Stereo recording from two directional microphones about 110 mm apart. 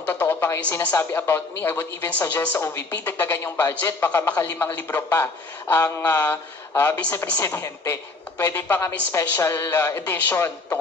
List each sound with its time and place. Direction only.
0.0 s a man's voice: 15° left (ahead or behind)